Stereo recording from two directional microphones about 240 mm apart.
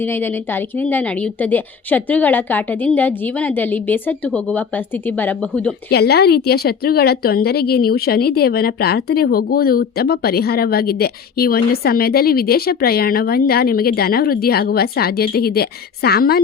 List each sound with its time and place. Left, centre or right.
0.0 s a woman's voice: centre
5.9 s a woman's voice: left